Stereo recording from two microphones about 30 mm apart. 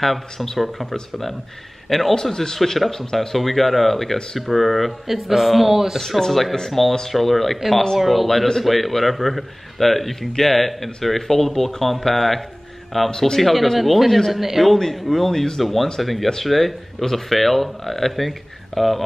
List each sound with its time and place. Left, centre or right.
0.0 s speech: centre
3.3 s speech: centre
5.9 s speech: centre
14.6 s speech: centre